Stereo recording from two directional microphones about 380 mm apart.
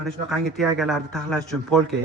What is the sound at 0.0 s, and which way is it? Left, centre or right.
Speech, centre.